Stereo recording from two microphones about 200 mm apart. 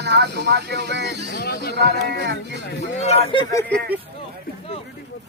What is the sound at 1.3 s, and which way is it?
Speech, 55° left (ahead or behind).